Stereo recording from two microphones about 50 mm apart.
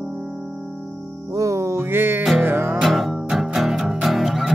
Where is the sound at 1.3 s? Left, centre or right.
Right.